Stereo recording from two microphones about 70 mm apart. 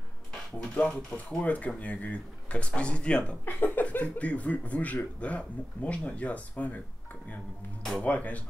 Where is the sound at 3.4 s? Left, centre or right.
Left.